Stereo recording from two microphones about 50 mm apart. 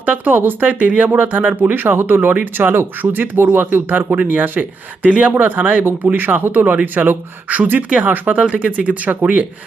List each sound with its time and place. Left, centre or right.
0.0 s speech: right
1.7 s speech: right
8.0 s speech: right
8.4 s speech: right